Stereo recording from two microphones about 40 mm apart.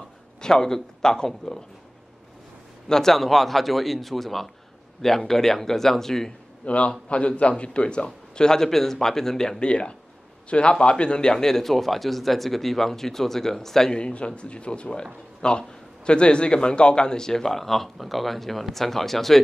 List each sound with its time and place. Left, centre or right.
0.4 s speech: centre
2.9 s speech: centre
6.6 s a man's voice: left; by 9.6 s centre
9.6 s speech: left
13.9 s speech: left; by 19.4 s centre